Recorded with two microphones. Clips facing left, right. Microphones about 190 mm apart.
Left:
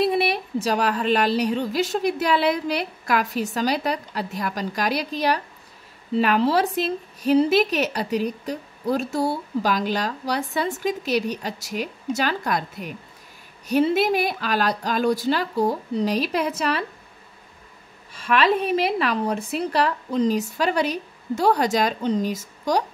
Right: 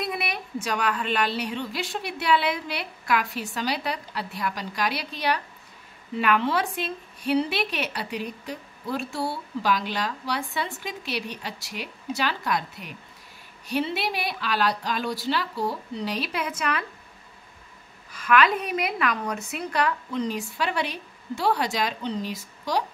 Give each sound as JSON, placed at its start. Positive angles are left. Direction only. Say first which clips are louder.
{"t": 0.0, "sound": "speech", "louder": "left 9 dB", "side_deg": 30}
{"t": 18.1, "sound": "speech", "louder": "left 2 dB", "side_deg": 30}